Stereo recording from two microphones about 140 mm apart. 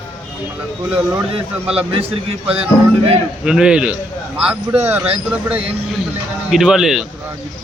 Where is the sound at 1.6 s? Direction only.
45° right (ahead or behind).